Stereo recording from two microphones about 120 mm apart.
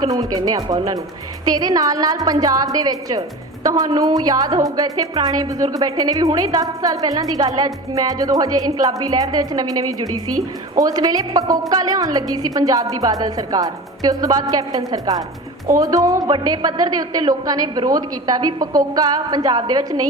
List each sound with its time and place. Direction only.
0.0 s a woman's voice: 30° right (ahead or behind)